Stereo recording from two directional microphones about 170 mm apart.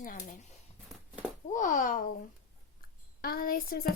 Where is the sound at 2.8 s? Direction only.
60° left (ahead or behind).